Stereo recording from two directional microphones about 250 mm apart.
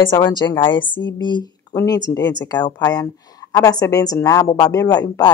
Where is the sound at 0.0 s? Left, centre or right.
Centre.